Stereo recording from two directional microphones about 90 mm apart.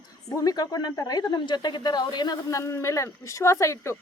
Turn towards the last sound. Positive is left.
turn(degrees=35)  # may be behind; listen again after turning